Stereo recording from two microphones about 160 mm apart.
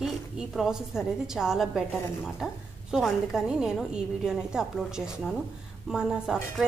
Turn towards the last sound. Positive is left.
turn(degrees=-5)  # may be behind; listen again after turning